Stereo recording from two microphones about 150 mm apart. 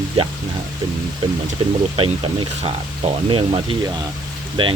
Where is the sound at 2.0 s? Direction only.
35° right (ahead or behind).